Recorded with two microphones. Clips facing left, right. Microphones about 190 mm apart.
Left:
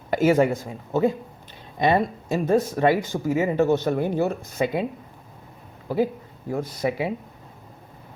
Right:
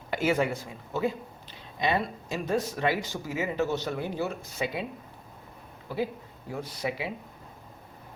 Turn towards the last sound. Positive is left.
turn(degrees=45)  # may be behind; listen again after turning